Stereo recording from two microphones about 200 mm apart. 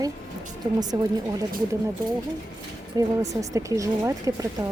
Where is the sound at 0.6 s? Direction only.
20° right (ahead or behind).